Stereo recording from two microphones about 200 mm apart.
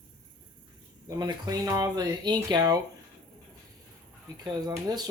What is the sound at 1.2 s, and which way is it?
Speech, 20° right (ahead or behind).